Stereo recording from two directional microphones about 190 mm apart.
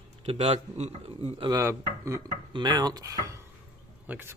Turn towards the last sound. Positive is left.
turn(degrees=-10)  # may be behind; listen again after turning